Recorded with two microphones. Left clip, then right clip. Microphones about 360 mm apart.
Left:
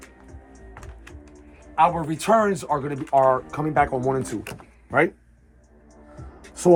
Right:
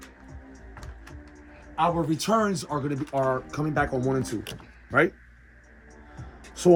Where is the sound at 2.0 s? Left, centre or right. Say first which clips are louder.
Left 5 dB; centre.